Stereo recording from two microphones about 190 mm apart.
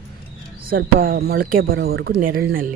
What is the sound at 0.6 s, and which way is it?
Speech, 50° right (ahead or behind).